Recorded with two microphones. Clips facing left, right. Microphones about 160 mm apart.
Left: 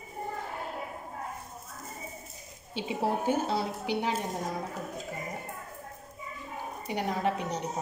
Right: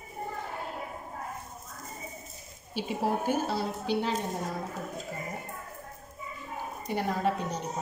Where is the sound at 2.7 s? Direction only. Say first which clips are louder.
Even; 20° left (ahead or behind).